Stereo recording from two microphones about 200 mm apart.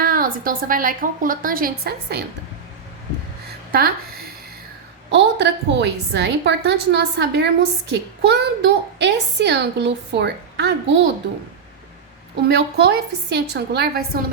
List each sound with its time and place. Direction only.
0.0 s a woman's voice: 45° right (ahead or behind)
3.7 s speech: 50° right (ahead or behind)
5.1 s a woman's voice: 60° right (ahead or behind)
12.5 s a woman's voice: 60° right (ahead or behind)